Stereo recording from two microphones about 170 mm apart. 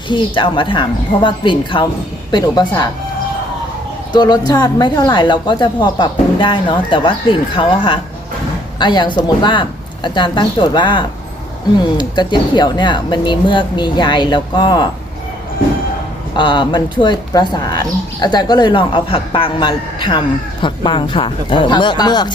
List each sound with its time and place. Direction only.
0.1 s speech: 30° left (ahead or behind)
4.1 s speech: 25° left (ahead or behind)
16.3 s speech: 30° left (ahead or behind)